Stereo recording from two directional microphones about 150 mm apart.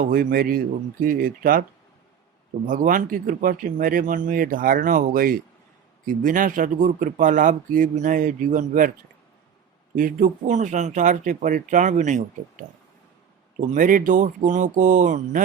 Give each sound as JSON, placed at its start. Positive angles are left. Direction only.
{"t": 0.0, "sound": "a man's voice", "side_deg": -70}
{"t": 2.6, "sound": "speech", "side_deg": -60}
{"t": 9.9, "sound": "speech", "side_deg": -65}
{"t": 13.7, "sound": "speech", "side_deg": -60}